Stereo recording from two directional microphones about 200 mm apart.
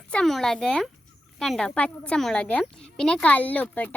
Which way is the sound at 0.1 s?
Centre (ahead or behind).